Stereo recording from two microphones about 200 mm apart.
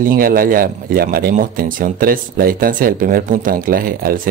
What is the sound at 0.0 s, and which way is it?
Speech, 45° right (ahead or behind).